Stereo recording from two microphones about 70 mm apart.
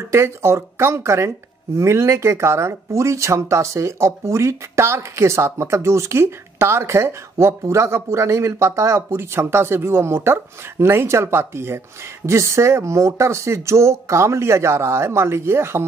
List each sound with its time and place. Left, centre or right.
0.0 s speech: right